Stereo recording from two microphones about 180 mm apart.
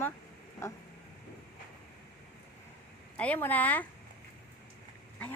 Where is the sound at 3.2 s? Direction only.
10° left (ahead or behind).